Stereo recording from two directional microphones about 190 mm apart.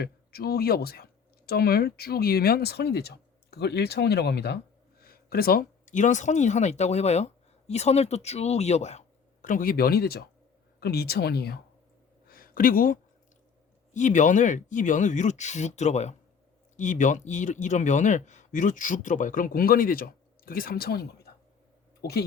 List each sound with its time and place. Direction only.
0.0 s speech: 55° left (ahead or behind)
12.3 s a sound: 50° left (ahead or behind)
13.9 s speech: 40° left (ahead or behind)